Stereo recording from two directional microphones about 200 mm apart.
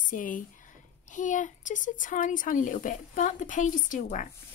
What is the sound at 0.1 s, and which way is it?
Speech, 40° left (ahead or behind).